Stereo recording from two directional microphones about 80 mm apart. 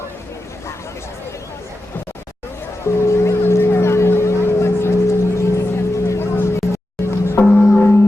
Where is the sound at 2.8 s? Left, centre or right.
Left.